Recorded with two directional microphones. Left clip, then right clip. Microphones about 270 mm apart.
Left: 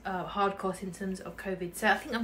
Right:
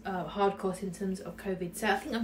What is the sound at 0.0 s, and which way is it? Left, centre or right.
Speech, centre.